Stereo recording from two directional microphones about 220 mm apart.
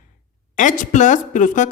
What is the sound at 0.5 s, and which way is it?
Speech, 35° left (ahead or behind).